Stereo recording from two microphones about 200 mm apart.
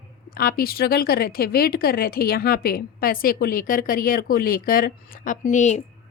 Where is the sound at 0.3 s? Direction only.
50° left (ahead or behind).